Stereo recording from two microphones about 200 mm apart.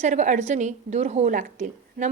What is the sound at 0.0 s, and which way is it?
A woman's voice, 35° right (ahead or behind).